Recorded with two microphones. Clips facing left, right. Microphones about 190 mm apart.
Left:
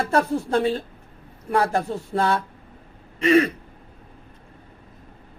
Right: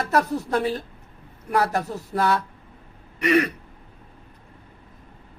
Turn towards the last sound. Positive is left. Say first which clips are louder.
# left 3 dB
turn(degrees=25)  # may be behind; listen again after turning